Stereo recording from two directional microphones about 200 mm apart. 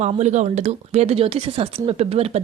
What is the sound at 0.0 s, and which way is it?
Speech, 35° right (ahead or behind).